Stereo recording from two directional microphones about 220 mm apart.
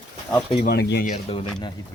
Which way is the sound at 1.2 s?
25° left (ahead or behind).